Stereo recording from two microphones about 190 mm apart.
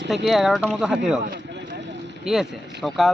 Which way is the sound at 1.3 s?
65° right (ahead or behind).